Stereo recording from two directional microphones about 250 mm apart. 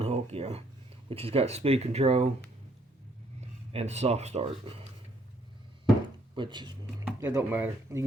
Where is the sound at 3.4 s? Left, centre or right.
Right.